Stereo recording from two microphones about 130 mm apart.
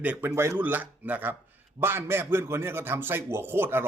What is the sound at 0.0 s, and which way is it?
A man's voice, 10° right (ahead or behind).